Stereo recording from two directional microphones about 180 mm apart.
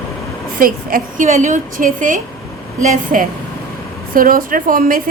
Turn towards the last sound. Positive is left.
turn(degrees=-50)  # may be behind; listen again after turning